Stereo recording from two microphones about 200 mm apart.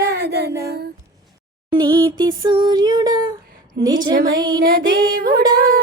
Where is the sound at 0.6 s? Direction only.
55° right (ahead or behind).